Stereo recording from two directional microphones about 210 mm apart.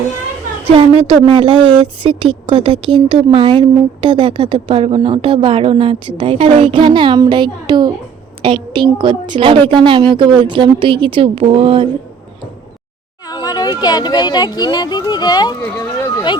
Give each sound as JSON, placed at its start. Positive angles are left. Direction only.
{"t": 0.7, "sound": "a woman's voice", "side_deg": -25}
{"t": 13.2, "sound": "speech", "side_deg": 20}